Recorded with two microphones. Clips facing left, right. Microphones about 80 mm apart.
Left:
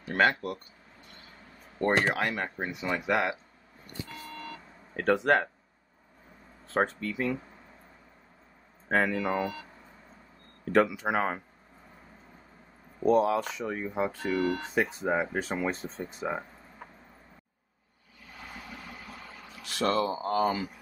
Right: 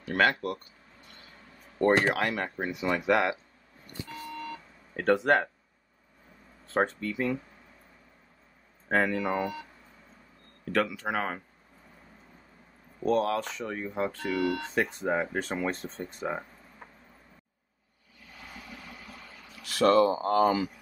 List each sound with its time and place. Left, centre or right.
0.0 s speech: centre
1.8 s speech: centre
4.3 s a sound: centre
6.7 s speech: centre
8.8 s speech: centre
10.6 s speech: left
13.0 s speech: centre
14.3 s speech: left
14.6 s speech: centre
19.8 s speech: centre